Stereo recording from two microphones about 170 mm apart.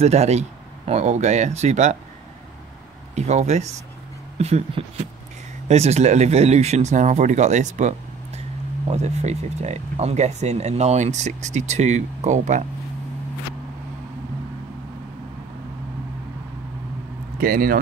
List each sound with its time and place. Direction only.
0.0 s speech: 40° right (ahead or behind)
3.2 s speech: 40° right (ahead or behind)
17.4 s speech: 55° right (ahead or behind)